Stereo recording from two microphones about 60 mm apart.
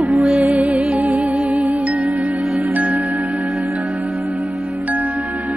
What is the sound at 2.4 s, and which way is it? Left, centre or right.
Music, centre.